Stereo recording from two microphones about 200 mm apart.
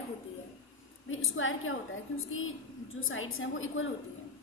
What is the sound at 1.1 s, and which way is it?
Speech, 80° left.